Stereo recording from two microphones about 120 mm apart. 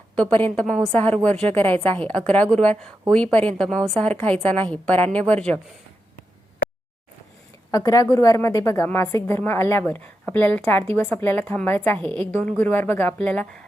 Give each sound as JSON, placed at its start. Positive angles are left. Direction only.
{"t": 0.2, "sound": "a woman's voice", "side_deg": 15}
{"t": 7.7, "sound": "a woman's voice", "side_deg": 30}